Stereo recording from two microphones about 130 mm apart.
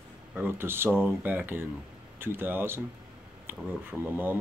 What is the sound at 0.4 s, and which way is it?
Speech, 15° right (ahead or behind).